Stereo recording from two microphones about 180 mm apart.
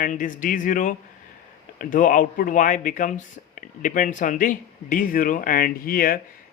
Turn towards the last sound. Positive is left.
turn(degrees=55)  # may be behind; listen again after turning